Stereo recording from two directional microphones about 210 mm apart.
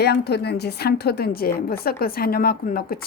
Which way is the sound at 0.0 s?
50° left (ahead or behind).